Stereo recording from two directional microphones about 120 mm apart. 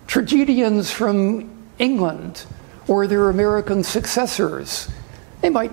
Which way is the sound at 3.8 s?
5° left (ahead or behind).